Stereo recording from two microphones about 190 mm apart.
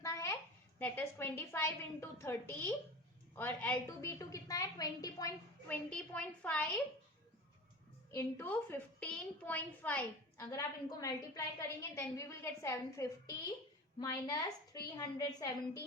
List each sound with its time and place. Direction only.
0.0 s a sound: 15° left (ahead or behind)
0.8 s a woman's voice: 10° left (ahead or behind)
8.1 s a woman's voice: 10° left (ahead or behind)
10.4 s a woman's voice: 20° left (ahead or behind)